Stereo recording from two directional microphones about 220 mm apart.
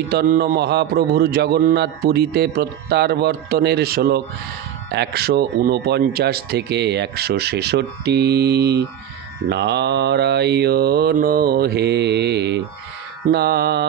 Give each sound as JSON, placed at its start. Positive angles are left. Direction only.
{"t": 0.1, "sound": "speech", "side_deg": -40}